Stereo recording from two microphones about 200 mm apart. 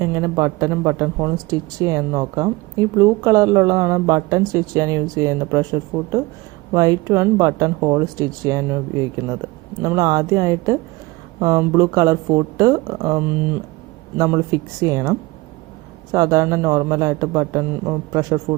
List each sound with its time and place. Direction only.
0.0 s speech: 15° right (ahead or behind)
16.1 s speech: 15° right (ahead or behind)